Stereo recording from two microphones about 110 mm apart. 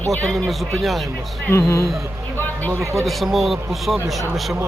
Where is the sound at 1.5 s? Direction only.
25° left (ahead or behind).